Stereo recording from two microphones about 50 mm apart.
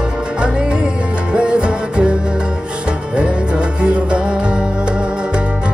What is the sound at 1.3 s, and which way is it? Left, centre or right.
Music, centre.